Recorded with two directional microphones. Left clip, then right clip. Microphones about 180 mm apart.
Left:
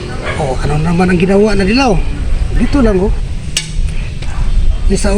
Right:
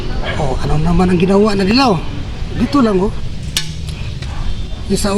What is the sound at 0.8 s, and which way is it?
Speech, 10° right (ahead or behind).